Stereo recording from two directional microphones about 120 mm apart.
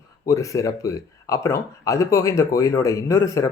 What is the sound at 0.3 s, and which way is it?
Speech, 25° left (ahead or behind).